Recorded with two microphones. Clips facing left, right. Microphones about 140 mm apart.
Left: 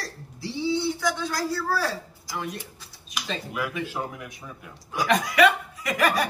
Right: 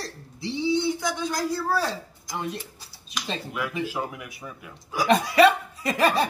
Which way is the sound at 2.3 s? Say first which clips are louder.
Right 1 dB; 30° right (ahead or behind).